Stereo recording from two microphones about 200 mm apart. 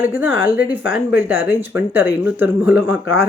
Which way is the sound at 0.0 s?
10° right (ahead or behind).